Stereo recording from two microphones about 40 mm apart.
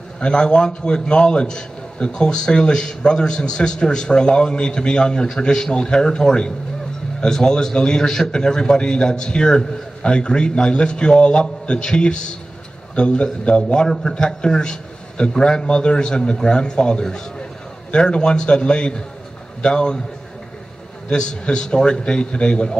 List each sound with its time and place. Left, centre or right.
0.2 s a man's voice: left
13.7 s a man's voice: centre
21.1 s a man's voice: centre